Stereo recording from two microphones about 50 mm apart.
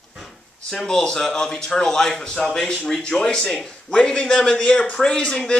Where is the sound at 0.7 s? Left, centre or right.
Centre.